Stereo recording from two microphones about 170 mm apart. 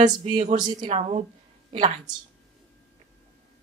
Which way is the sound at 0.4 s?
45° right (ahead or behind).